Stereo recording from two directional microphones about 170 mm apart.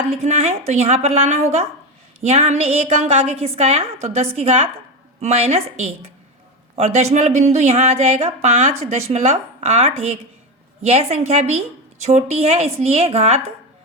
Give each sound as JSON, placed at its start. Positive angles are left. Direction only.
{"t": 0.1, "sound": "a woman's voice", "side_deg": -40}